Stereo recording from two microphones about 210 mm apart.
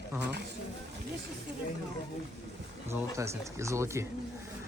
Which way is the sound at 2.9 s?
10° right (ahead or behind).